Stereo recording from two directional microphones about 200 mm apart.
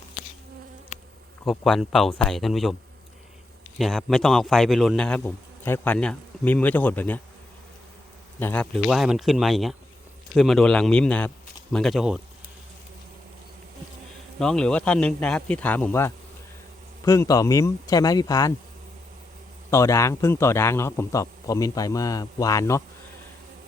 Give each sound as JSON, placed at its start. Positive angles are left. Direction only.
{"t": 1.5, "sound": "a man's voice", "side_deg": 0}
{"t": 3.8, "sound": "a man's voice", "side_deg": 0}
{"t": 8.4, "sound": "a man's voice", "side_deg": 10}
{"t": 14.3, "sound": "a man's voice", "side_deg": 5}
{"t": 19.7, "sound": "a man's voice", "side_deg": 15}